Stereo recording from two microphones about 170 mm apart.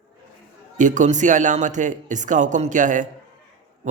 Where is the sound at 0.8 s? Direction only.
45° right (ahead or behind).